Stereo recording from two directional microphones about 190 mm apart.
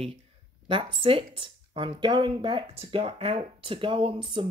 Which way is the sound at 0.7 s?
30° right (ahead or behind).